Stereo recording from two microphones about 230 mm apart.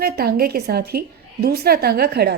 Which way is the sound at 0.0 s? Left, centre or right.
Right.